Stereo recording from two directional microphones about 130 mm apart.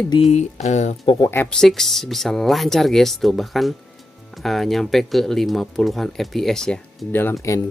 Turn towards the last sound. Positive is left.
turn(degrees=20)  # may be behind; listen again after turning